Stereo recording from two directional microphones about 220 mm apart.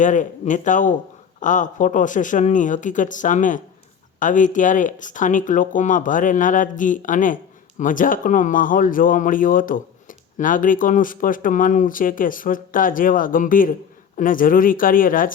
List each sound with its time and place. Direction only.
0.0 s speech: 35° left (ahead or behind)